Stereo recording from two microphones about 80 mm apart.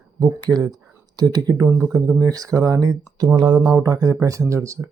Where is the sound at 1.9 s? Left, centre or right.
Right.